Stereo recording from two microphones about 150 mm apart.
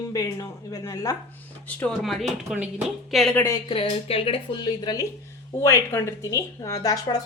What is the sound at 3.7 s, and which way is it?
A woman's voice, 35° left (ahead or behind).